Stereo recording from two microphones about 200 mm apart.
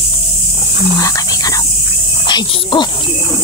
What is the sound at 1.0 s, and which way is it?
Dog, 15° left (ahead or behind).